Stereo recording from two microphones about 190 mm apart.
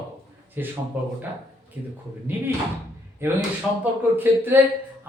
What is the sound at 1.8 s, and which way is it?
Speech, 10° right (ahead or behind).